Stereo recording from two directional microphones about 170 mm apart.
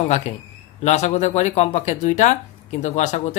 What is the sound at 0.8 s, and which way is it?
Speech, 40° left (ahead or behind).